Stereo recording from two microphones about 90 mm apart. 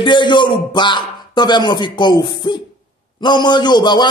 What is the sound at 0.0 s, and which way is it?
Speech, 60° left (ahead or behind).